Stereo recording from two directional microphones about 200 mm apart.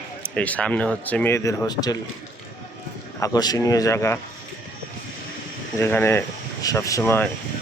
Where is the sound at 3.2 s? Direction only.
20° left (ahead or behind).